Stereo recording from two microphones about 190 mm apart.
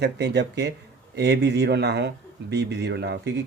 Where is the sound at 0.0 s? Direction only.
60° right (ahead or behind).